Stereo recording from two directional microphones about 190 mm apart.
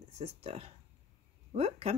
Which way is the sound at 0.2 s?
35° right (ahead or behind).